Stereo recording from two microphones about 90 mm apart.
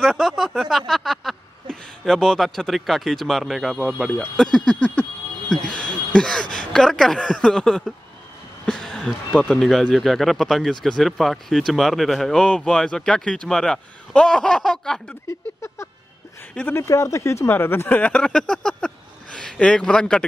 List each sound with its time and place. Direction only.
0.0 s speech: centre (ahead or behind)
8.6 s a sound: 5° left (ahead or behind)
9.4 s speech: 5° left (ahead or behind)
15.2 s a sound: 30° left (ahead or behind)
16.7 s speech: 35° left (ahead or behind)
17.8 s speech: 15° left (ahead or behind)